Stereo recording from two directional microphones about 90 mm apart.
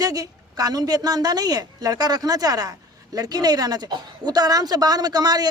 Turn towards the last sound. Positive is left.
turn(degrees=-45)  # may be behind; listen again after turning